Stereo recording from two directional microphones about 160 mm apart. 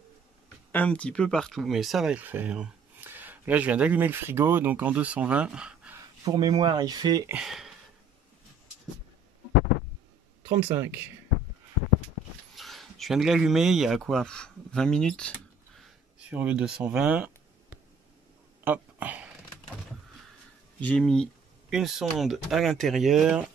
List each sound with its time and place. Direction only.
0.7 s speech: 10° left (ahead or behind)
5.9 s speech: 25° right (ahead or behind)
7.3 s speech: centre (ahead or behind)
10.6 s speech: 15° right (ahead or behind)
12.5 s speech: centre (ahead or behind)
16.2 s speech: 10° right (ahead or behind)
18.6 s a sound: 10° right (ahead or behind)
20.8 s speech: 5° left (ahead or behind)